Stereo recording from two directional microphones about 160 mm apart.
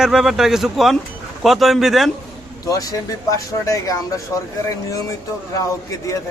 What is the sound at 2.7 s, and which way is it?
Speech, 20° left (ahead or behind).